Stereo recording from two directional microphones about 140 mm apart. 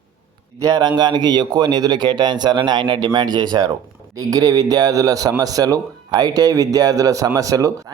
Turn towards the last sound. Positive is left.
turn(degrees=-25)  # may be behind; listen again after turning